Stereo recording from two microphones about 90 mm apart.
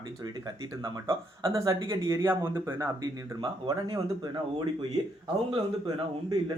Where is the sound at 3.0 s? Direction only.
60° right (ahead or behind).